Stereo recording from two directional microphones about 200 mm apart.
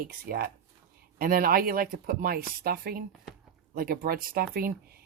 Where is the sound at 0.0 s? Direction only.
45° right (ahead or behind).